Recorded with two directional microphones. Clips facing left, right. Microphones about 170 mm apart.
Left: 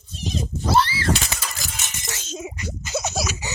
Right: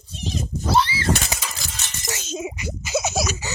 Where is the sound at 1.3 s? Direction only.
10° right (ahead or behind).